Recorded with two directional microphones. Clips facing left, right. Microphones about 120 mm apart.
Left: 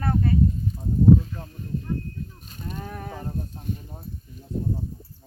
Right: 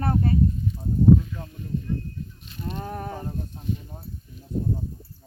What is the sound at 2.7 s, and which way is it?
Speech, 30° right (ahead or behind).